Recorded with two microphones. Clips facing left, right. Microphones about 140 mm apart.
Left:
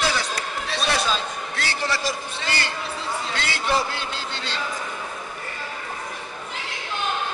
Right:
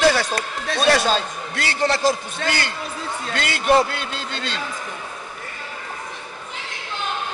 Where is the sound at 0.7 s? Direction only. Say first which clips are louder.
Right 7 dB; 80° right.